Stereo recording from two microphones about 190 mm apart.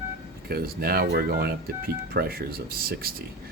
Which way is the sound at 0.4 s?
50° right (ahead or behind).